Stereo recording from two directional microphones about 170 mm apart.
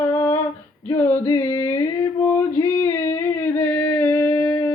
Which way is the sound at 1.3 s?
15° left (ahead or behind).